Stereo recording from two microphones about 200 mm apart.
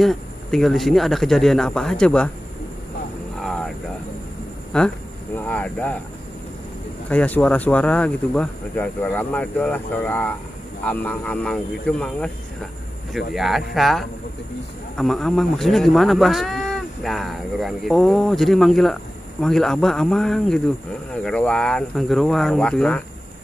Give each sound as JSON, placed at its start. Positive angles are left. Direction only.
{"t": 0.0, "sound": "speech", "side_deg": 0}
{"t": 3.3, "sound": "a sound", "side_deg": 0}
{"t": 4.7, "sound": "speech", "side_deg": 5}
{"t": 7.1, "sound": "speech", "side_deg": 5}
{"t": 13.3, "sound": "speech", "side_deg": 0}